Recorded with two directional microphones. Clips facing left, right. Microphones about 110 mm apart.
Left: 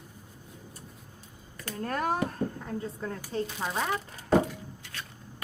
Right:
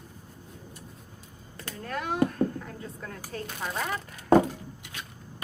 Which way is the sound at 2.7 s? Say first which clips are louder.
Left 5 dB; 25° left (ahead or behind).